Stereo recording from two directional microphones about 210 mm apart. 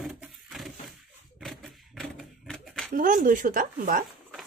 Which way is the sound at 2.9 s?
40° right (ahead or behind).